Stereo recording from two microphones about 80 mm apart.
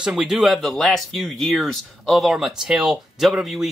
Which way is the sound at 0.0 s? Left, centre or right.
Centre.